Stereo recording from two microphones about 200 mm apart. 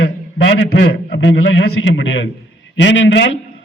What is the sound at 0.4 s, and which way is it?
A man's voice, 65° left (ahead or behind).